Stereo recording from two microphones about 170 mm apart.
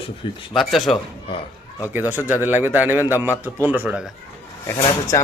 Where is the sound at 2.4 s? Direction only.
10° right (ahead or behind).